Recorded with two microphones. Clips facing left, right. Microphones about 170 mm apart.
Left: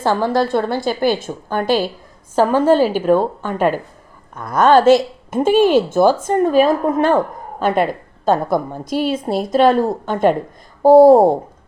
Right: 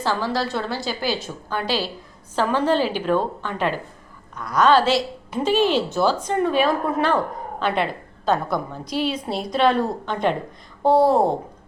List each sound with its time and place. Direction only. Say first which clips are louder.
0.0 s a woman's voice: left 7 dB; 50° left (ahead or behind)